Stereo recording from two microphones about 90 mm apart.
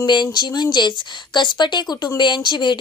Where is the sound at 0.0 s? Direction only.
55° left (ahead or behind).